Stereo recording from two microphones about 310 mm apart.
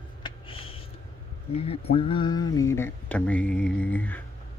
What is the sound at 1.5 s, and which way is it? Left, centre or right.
Speech, centre.